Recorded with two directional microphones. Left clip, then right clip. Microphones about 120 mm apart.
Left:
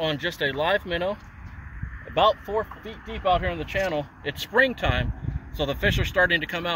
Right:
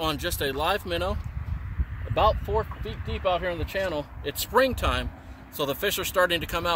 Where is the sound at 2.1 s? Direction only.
45° right (ahead or behind).